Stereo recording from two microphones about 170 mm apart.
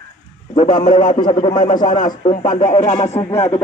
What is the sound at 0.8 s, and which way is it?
Speech, 50° left (ahead or behind).